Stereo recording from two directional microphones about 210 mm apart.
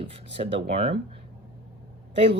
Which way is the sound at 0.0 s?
25° right (ahead or behind).